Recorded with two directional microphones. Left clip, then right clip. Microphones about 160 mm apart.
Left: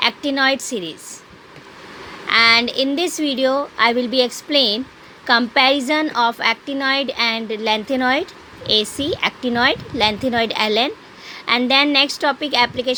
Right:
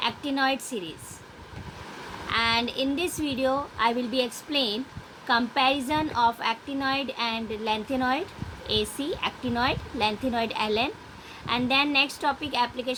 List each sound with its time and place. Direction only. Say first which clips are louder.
0.0 s a woman's voice: left 9 dB; 55° left (ahead or behind)
2.2 s a woman's voice: left 11 dB; 60° left (ahead or behind)